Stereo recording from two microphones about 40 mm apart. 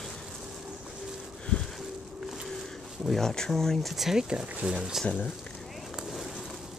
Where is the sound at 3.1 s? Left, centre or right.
Centre.